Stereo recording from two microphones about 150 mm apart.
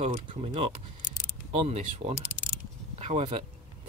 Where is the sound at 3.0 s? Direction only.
50° right (ahead or behind).